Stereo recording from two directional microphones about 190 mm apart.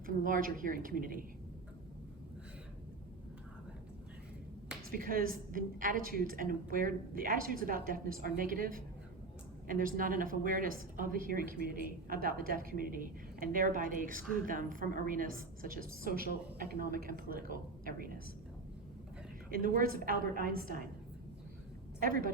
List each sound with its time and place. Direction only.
0.0 s a woman's voice: 45° right (ahead or behind)
4.9 s a woman's voice: 50° right (ahead or behind)
19.5 s a woman's voice: 50° right (ahead or behind)
22.0 s a woman's voice: 50° right (ahead or behind)